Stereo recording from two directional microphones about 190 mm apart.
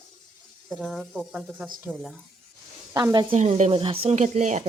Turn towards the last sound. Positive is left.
turn(degrees=-40)  # may be behind; listen again after turning